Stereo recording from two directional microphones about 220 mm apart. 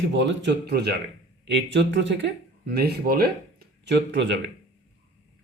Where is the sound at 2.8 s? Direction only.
45° right (ahead or behind).